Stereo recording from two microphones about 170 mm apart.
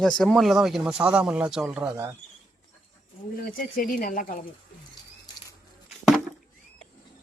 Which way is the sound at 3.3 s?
60° left (ahead or behind).